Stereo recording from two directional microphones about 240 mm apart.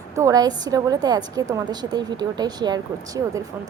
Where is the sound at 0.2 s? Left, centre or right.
Centre.